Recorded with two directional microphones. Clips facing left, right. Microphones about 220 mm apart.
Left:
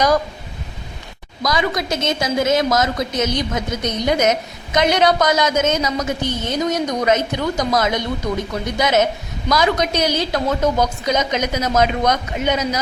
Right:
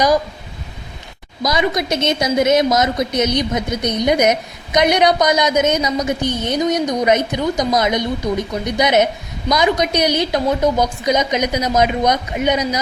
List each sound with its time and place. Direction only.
1.4 s a woman's voice: 20° right (ahead or behind)